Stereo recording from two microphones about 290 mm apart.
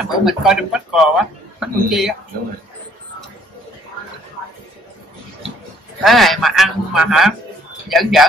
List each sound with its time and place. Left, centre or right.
0.0 s speech: centre
6.0 s speech: centre